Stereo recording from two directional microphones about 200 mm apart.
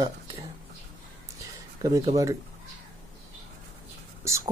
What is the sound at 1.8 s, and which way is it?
Speech, 15° right (ahead or behind).